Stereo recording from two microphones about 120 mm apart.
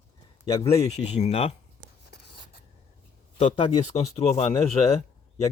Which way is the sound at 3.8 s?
65° left (ahead or behind).